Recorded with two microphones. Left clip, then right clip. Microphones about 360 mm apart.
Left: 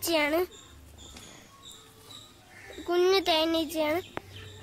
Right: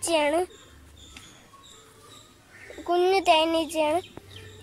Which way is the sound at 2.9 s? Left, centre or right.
Centre.